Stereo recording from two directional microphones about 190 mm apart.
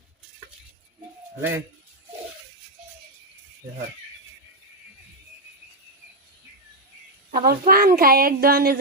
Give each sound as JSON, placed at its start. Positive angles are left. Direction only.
{"t": 1.4, "sound": "speech", "side_deg": -10}
{"t": 7.4, "sound": "a woman's voice", "side_deg": -50}